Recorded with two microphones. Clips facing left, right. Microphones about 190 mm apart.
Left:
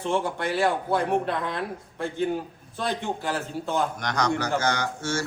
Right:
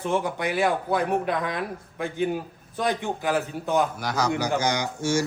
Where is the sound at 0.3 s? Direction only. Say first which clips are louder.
Even; 15° right (ahead or behind).